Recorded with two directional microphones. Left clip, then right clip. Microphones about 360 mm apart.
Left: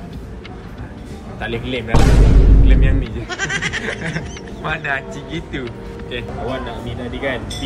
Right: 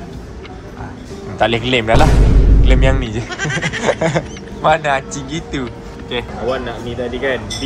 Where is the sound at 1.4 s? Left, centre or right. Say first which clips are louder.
Right 10 dB; centre.